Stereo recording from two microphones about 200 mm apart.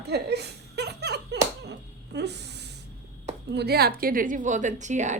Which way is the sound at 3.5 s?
55° right (ahead or behind).